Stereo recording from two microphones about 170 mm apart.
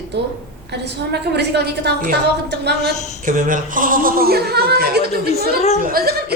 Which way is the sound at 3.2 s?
50° right (ahead or behind).